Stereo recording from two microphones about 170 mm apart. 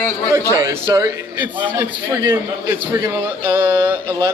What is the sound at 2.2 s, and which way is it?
A man's voice, 15° right (ahead or behind).